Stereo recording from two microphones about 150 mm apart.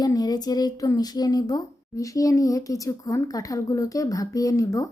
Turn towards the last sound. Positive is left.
turn(degrees=20)  # may be behind; listen again after turning